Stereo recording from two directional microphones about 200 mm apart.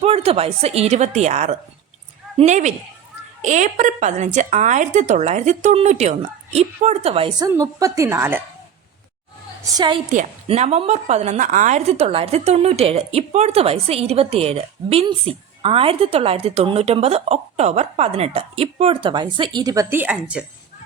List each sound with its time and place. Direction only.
0.0 s a woman's voice: 30° right (ahead or behind)
7.4 s a woman's voice: 15° right (ahead or behind)
9.7 s a woman's voice: 20° right (ahead or behind)
10.1 s a woman's voice: 35° right (ahead or behind); by 20.4 s 5° right (ahead or behind)